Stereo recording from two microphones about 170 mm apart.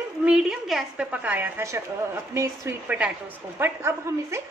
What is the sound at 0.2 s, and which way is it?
A woman's voice, 5° right (ahead or behind).